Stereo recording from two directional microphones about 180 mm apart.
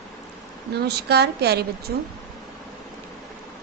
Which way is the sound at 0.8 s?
65° right (ahead or behind).